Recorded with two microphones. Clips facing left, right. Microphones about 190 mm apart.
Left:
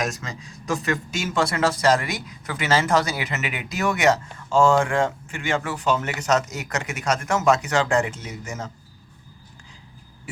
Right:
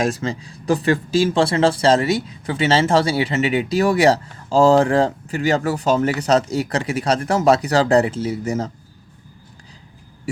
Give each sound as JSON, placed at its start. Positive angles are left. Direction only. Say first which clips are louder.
{"t": 0.0, "sound": "speech", "louder": "right 7 dB", "side_deg": -30}